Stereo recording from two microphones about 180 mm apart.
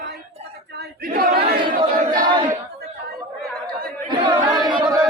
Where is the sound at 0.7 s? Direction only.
55° right (ahead or behind).